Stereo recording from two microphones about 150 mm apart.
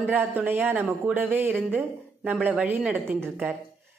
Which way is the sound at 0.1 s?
10° right (ahead or behind).